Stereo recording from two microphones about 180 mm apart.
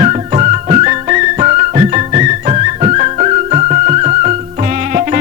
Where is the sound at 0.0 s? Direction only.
40° right (ahead or behind).